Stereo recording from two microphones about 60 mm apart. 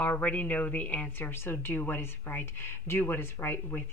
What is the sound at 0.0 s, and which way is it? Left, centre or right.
Speech, left.